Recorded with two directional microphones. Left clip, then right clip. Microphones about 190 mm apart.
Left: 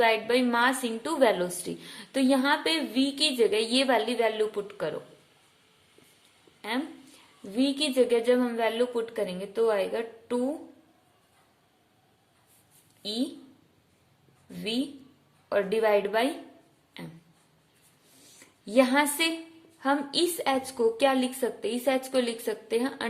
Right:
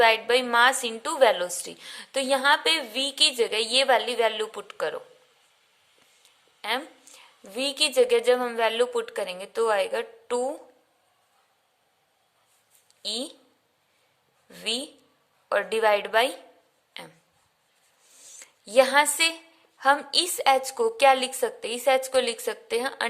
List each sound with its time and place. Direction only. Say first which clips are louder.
0.0 s a woman's voice: right 3 dB; 35° right (ahead or behind)
6.6 s a woman's voice: right 4 dB; 35° right (ahead or behind)
13.0 s speech: right 1 dB; 40° right (ahead or behind)
14.5 s a woman's voice: right 2 dB; 40° right (ahead or behind)
18.3 s a woman's voice: right 4 dB; 35° right (ahead or behind)